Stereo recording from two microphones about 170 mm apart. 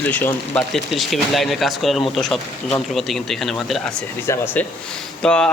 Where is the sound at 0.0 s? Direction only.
10° left (ahead or behind).